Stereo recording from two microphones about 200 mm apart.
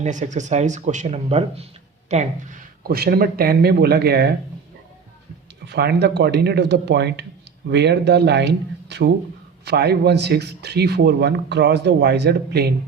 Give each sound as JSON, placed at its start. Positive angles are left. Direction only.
{"t": 0.0, "sound": "speech", "side_deg": -40}
{"t": 2.8, "sound": "speech", "side_deg": -50}
{"t": 5.6, "sound": "speech", "side_deg": -55}